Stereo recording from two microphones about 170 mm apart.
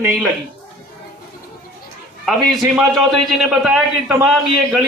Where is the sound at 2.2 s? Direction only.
Centre (ahead or behind).